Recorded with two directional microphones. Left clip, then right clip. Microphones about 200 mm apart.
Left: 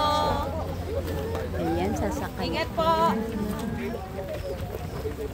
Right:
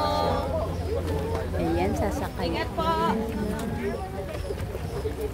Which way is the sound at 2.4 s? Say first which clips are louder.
Left 3 dB; 55° left (ahead or behind).